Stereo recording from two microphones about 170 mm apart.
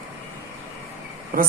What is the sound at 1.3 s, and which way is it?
Speech, 55° right (ahead or behind).